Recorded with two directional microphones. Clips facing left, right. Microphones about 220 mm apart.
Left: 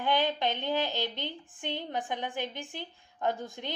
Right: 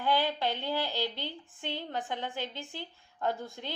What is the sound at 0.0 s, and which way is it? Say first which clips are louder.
A woman's voice: left 1 dB; 20° left (ahead or behind).